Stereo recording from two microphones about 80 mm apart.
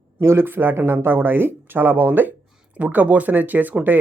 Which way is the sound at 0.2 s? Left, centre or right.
Right.